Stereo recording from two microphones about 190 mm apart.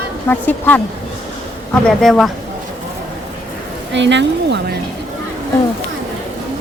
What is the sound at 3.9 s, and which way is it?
Speech, 70° right (ahead or behind).